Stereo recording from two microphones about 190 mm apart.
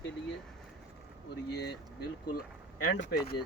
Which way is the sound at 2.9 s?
70° left (ahead or behind).